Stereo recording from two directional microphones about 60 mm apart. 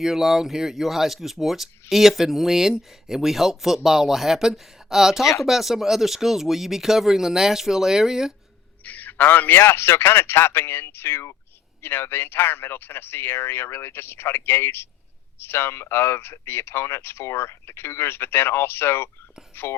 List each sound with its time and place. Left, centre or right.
0.0 s speech: centre
8.8 s speech: left